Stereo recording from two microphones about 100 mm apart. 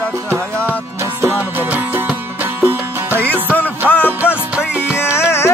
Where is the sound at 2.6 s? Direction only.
20° right (ahead or behind).